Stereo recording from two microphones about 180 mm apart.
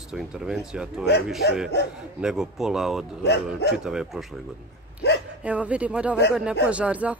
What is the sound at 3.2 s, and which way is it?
Speech, 65° left (ahead or behind).